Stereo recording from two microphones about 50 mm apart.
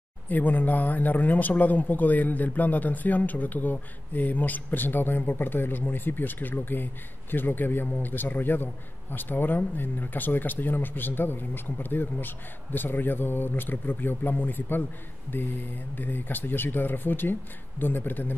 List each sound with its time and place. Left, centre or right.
0.3 s speech: left